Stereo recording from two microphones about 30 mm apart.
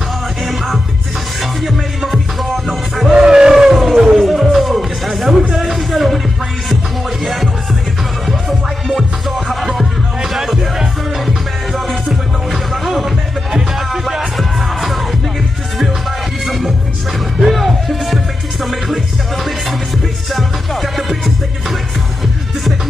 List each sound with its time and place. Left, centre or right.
1.4 s music: centre
3.1 s a sound: right
3.7 s music: centre
8.3 s music: centre
10.3 s music: centre
12.1 s music: centre
14.0 s music: centre
16.4 s music: centre
20.3 s music: centre